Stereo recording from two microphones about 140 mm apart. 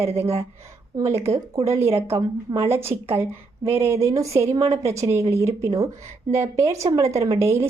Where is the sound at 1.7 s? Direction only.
15° right (ahead or behind).